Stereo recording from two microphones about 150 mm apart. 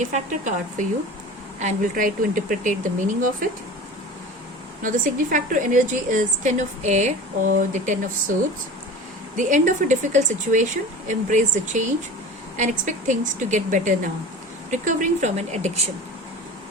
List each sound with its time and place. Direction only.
0.0 s a woman's voice: 55° right (ahead or behind)
4.8 s a woman's voice: 60° right (ahead or behind)
9.3 s a woman's voice: 55° right (ahead or behind)